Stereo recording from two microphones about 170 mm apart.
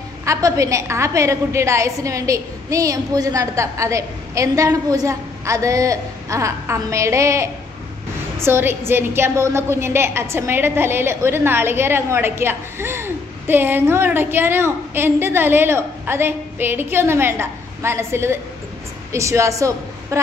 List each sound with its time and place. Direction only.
0.2 s a woman's voice: 20° right (ahead or behind)